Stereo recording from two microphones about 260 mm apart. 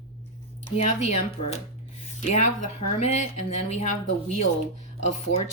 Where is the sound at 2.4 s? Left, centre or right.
Left.